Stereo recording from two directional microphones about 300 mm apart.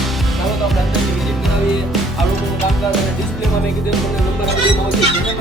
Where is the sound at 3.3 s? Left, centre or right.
Centre.